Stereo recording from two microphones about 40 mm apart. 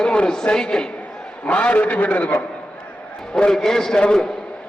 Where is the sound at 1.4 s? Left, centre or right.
Left.